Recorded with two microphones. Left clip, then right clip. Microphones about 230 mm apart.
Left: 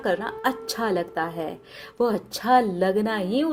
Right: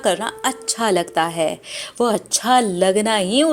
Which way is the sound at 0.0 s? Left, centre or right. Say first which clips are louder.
Right 5 dB; centre.